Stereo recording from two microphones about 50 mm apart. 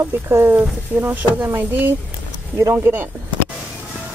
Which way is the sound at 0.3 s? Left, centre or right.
Right.